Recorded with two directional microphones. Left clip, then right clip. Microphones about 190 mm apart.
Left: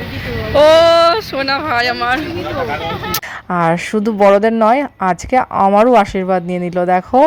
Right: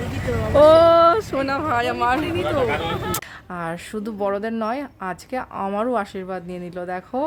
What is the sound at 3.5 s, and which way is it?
Speech, 35° left (ahead or behind).